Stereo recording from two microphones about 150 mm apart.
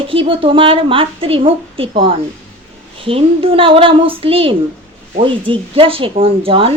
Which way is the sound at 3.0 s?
40° right (ahead or behind).